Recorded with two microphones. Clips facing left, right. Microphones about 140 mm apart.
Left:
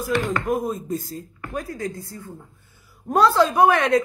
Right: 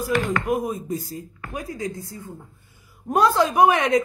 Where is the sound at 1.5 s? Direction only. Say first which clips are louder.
Left 1 dB; 20° right (ahead or behind).